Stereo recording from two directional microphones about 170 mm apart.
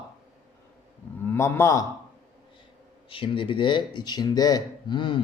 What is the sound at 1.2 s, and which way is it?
Speech, 15° left (ahead or behind).